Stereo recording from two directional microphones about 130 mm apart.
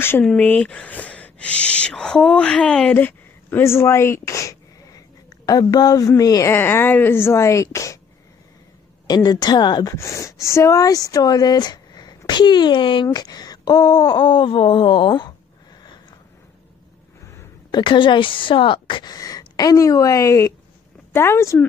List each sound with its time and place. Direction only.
0.2 s speech: 10° left (ahead or behind); by 8.0 s 25° left (ahead or behind)
9.0 s speech: 30° left (ahead or behind)
9.9 s a woman's voice: 25° left (ahead or behind)
17.6 s a woman's voice: 35° left (ahead or behind); by 21.6 s 20° left (ahead or behind)